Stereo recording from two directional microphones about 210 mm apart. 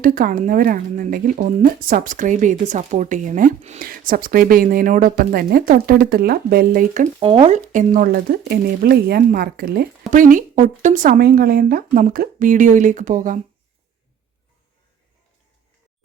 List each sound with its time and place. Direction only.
0.0 s speech: 40° right (ahead or behind)
7.2 s speech: 25° right (ahead or behind)